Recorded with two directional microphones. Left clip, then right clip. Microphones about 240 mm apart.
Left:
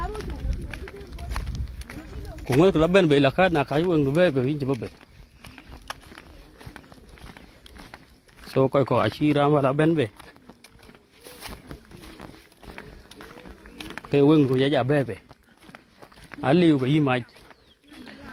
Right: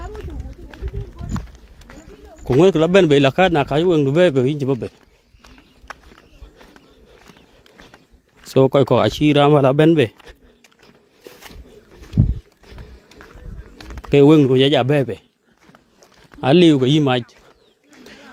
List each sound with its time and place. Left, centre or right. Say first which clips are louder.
2.6 s a man's voice: right 6 dB; right
8.5 s a man's voice: right 7 dB; right
14.0 s a man's voice: right 7 dB; right
16.4 s a man's voice: right 7 dB; right